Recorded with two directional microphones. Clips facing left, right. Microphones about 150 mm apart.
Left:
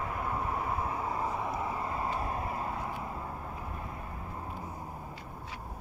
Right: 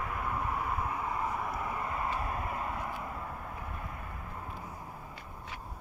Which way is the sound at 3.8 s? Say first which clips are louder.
Left 2 dB; 25° left (ahead or behind).